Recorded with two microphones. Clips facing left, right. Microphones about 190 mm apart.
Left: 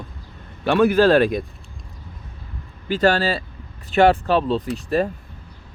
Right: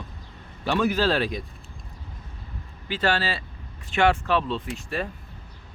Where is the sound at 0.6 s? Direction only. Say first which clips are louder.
Left 8 dB; 55° left (ahead or behind).